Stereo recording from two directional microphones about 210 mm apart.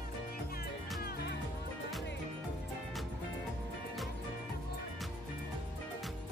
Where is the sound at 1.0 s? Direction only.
50° left (ahead or behind).